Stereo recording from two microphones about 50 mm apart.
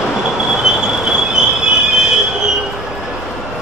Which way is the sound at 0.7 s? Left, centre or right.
Centre.